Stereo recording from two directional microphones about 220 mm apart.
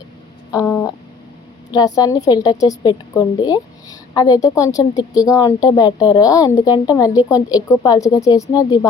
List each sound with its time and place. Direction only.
0.5 s a woman's voice: 10° left (ahead or behind)